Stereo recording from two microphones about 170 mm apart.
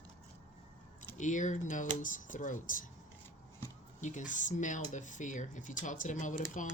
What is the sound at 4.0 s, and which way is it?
Speech, 45° left (ahead or behind).